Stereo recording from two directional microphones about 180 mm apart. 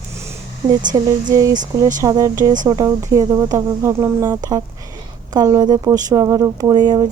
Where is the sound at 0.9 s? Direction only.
20° right (ahead or behind).